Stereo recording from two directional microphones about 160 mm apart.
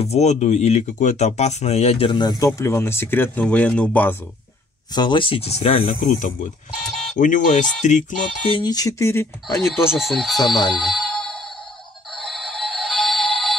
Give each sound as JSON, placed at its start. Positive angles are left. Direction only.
{"t": 0.0, "sound": "speech", "side_deg": 40}
{"t": 4.9, "sound": "speech", "side_deg": 30}
{"t": 5.9, "sound": "speech", "side_deg": 50}
{"t": 6.8, "sound": "speech", "side_deg": 0}
{"t": 7.2, "sound": "speech", "side_deg": 50}
{"t": 8.5, "sound": "speech", "side_deg": 30}
{"t": 9.8, "sound": "speech", "side_deg": 0}
{"t": 10.7, "sound": "music", "side_deg": 0}